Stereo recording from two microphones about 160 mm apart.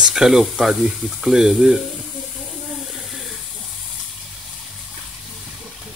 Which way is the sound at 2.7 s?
Centre (ahead or behind).